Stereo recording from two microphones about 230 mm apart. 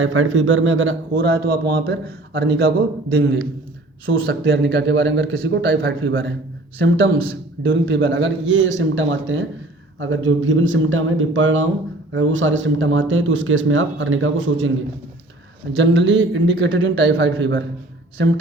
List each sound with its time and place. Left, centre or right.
0.0 s speech: right
1.1 s a man's voice: right
4.3 s a man's voice: right
7.6 s speech: right
15.7 s a man's voice: right